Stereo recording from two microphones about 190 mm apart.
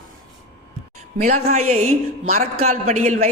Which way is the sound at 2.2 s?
50° right (ahead or behind).